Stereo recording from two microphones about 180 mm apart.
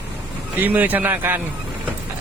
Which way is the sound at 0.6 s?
10° right (ahead or behind).